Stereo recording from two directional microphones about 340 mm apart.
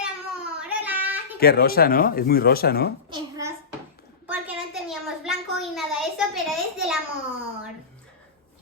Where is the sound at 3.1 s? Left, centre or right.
Centre.